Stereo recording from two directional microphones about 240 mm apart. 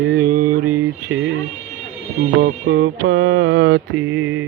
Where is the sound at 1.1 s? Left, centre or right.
Right.